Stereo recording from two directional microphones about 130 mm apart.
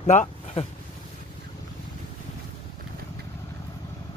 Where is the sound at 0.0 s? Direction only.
60° left (ahead or behind).